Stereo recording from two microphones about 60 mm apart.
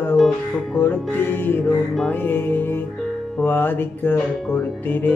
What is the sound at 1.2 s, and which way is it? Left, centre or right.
Music, left.